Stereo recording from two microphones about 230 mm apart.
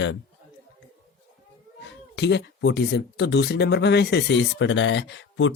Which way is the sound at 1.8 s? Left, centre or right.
Left.